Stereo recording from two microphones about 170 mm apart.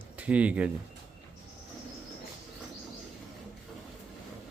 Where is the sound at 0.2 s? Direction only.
10° right (ahead or behind).